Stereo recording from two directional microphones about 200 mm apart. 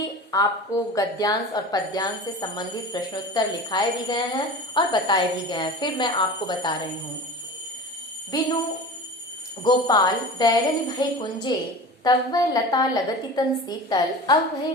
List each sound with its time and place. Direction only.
0.0 s a sound: 15° left (ahead or behind)
0.9 s a woman's voice: 20° left (ahead or behind)
8.3 s a woman's voice: 20° left (ahead or behind)
9.6 s a woman's voice: 20° left (ahead or behind)